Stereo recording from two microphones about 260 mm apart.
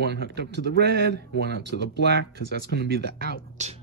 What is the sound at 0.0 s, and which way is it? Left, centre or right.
Speech, right.